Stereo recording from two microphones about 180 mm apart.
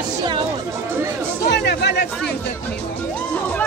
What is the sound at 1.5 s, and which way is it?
Chatter, 70° left (ahead or behind).